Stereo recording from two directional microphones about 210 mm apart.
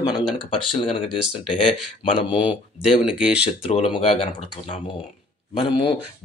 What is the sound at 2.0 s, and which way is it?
Speech, 25° left (ahead or behind).